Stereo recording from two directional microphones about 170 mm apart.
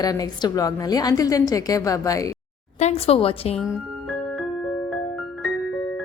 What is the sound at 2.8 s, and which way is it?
Speech, 40° left (ahead or behind).